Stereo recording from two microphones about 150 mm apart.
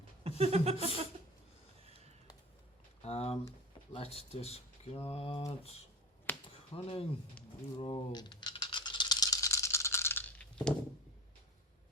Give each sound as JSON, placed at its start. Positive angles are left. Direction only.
{"t": 0.3, "sound": "a sound", "side_deg": -45}
{"t": 3.0, "sound": "speech", "side_deg": 45}
{"t": 6.3, "sound": "finger snapping", "side_deg": 10}
{"t": 6.7, "sound": "speech", "side_deg": 40}
{"t": 7.8, "sound": "rattle", "side_deg": 35}